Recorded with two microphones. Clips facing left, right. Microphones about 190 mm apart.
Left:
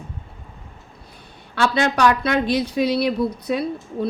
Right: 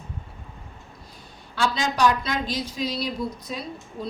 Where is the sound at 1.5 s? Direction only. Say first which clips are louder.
Left 5 dB; 65° left (ahead or behind).